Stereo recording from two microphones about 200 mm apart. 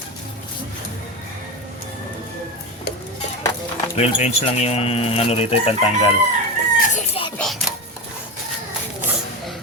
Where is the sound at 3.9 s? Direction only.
30° left (ahead or behind).